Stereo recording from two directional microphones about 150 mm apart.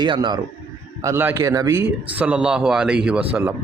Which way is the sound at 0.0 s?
30° right (ahead or behind).